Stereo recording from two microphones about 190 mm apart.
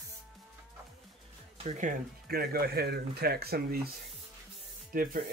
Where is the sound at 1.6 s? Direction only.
40° right (ahead or behind).